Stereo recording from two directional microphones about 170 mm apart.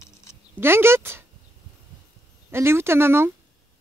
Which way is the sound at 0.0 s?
15° left (ahead or behind).